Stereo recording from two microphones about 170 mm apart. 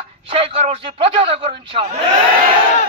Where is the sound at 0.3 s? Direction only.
35° right (ahead or behind).